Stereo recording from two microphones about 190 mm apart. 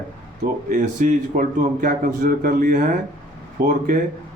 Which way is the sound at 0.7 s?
45° right (ahead or behind).